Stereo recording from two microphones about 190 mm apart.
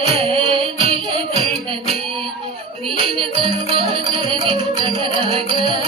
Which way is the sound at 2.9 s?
25° right (ahead or behind).